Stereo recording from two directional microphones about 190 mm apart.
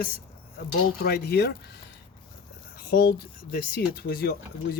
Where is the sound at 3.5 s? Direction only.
55° left (ahead or behind).